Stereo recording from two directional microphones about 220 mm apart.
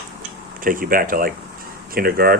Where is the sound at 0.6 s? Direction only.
40° right (ahead or behind).